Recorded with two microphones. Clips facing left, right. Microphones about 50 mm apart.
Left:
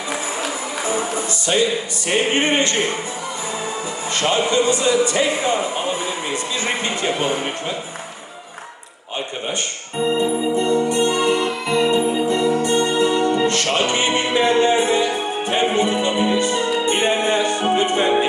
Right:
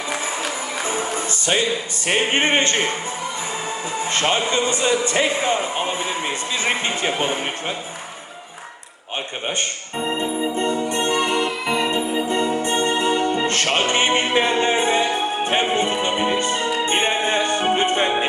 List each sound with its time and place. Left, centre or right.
2.0 s speech: right
4.1 s speech: right
6.8 s speech: right
10.6 s music: right
11.1 s music: centre
12.3 s music: right